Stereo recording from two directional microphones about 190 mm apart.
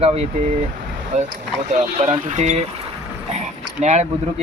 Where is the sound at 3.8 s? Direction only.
35° right (ahead or behind).